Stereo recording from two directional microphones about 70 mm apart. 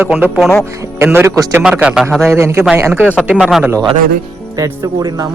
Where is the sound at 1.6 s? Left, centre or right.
Centre.